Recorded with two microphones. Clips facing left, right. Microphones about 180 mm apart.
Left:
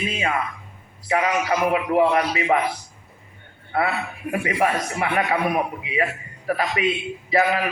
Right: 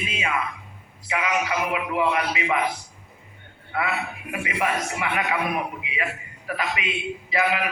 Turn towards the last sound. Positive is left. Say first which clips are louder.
# left 4 dB
turn(degrees=40)  # may be behind; listen again after turning